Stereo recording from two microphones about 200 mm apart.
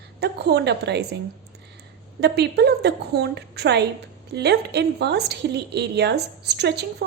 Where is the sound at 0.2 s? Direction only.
55° right (ahead or behind).